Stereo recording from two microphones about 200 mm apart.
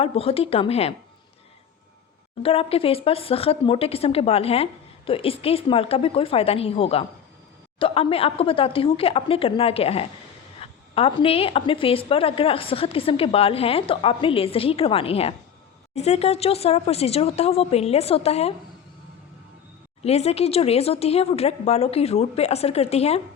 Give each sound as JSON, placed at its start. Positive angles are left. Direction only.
{"t": 0.0, "sound": "a woman's voice", "side_deg": 30}
{"t": 2.4, "sound": "a woman's voice", "side_deg": 30}
{"t": 20.0, "sound": "speech", "side_deg": 30}